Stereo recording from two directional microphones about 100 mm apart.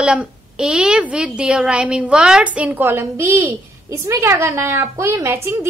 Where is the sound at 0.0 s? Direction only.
10° right (ahead or behind).